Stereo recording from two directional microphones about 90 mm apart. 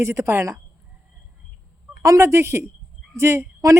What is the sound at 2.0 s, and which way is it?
A woman's voice, 35° right (ahead or behind).